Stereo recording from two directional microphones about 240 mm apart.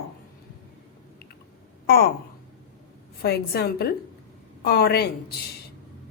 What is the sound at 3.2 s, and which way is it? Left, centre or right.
A woman's voice, left.